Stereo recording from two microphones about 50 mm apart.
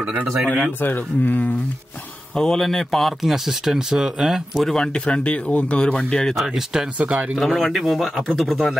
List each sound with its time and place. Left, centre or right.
0.0 s speech: right
0.7 s a man's voice: left
2.3 s speech: centre
3.2 s speech: centre
4.6 s speech: centre
6.3 s speech: centre
7.0 s speech: right
7.3 s speech: centre